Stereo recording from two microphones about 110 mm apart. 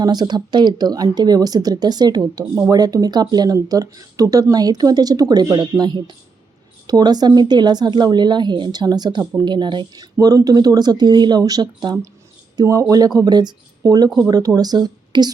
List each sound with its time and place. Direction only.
0.0 s speech: 40° right (ahead or behind)